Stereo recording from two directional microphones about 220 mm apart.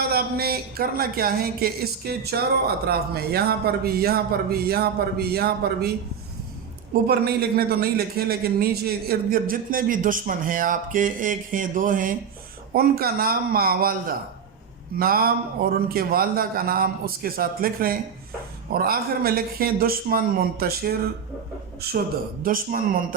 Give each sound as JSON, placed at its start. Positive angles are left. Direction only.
{"t": 0.1, "sound": "speech", "side_deg": -45}
{"t": 7.1, "sound": "a man's voice", "side_deg": -45}